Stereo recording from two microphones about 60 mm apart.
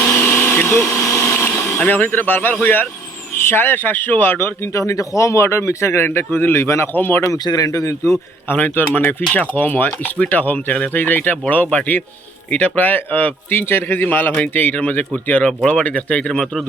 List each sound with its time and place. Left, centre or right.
0.1 s blender: left
0.9 s vacuum cleaner: left
1.8 s a man's voice: left
6.6 s speech: left
6.9 s a man's voice: left
7.3 s a man's voice: left
8.4 s a man's voice: left; by 16.6 s centre